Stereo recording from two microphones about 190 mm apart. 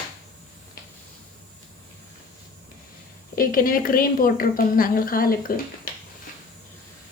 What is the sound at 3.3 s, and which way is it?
A woman's voice, 50° left (ahead or behind).